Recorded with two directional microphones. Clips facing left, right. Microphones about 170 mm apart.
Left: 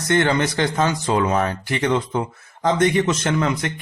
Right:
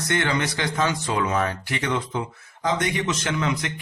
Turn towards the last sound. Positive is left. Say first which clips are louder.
# left 4 dB
turn(degrees=40)  # may be behind; listen again after turning